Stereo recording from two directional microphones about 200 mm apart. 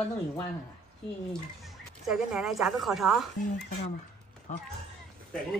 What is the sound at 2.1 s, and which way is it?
Speech, 5° right (ahead or behind).